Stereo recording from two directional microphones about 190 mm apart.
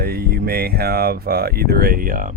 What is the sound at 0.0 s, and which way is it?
Speech, 50° right (ahead or behind).